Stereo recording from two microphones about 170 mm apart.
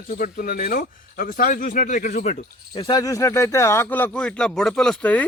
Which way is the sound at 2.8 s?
25° left (ahead or behind).